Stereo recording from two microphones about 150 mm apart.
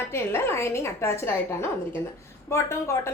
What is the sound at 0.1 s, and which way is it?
A woman's voice, 15° left (ahead or behind).